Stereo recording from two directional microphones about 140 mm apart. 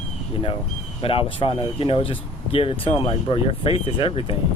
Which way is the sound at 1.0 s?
40° left (ahead or behind).